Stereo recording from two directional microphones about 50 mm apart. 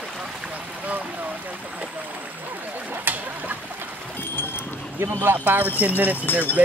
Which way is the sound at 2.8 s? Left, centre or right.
Right.